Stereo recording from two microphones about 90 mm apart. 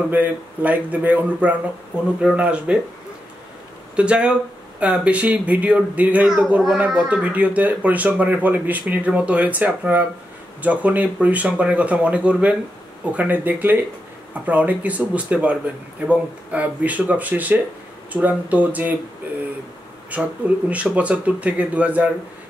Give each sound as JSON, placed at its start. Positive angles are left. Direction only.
{"t": 0.1, "sound": "a man's voice", "side_deg": -20}
{"t": 3.9, "sound": "a man's voice", "side_deg": -10}
{"t": 20.1, "sound": "speech", "side_deg": -15}